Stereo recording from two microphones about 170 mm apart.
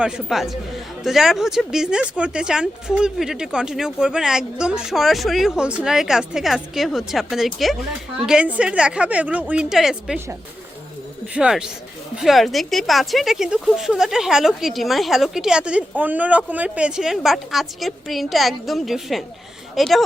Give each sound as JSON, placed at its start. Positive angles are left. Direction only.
{"t": 0.0, "sound": "a woman's voice", "side_deg": 0}
{"t": 11.3, "sound": "speech", "side_deg": -5}